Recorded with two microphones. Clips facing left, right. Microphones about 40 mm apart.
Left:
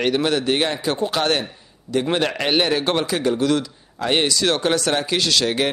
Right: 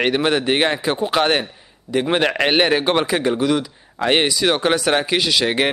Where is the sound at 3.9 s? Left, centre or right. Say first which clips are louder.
Right 3 dB; right.